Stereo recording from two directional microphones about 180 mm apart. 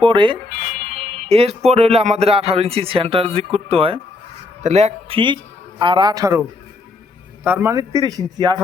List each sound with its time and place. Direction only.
0.0 s speech: 30° right (ahead or behind)
7.4 s speech: 10° right (ahead or behind)